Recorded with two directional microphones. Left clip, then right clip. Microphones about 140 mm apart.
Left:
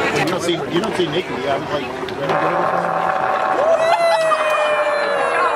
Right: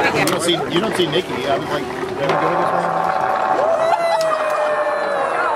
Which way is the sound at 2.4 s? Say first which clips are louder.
Even; centre (ahead or behind).